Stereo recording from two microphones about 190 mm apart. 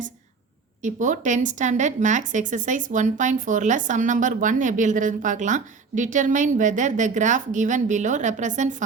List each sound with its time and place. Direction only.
0.8 s a woman's voice: 40° right (ahead or behind)